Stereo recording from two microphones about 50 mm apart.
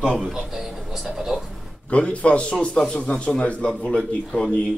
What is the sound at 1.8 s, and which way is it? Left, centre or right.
A man's voice, left.